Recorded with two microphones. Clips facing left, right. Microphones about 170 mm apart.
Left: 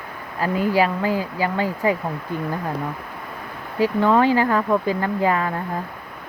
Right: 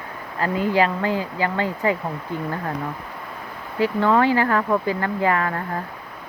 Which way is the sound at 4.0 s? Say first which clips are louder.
Left 1 dB; 15° left (ahead or behind).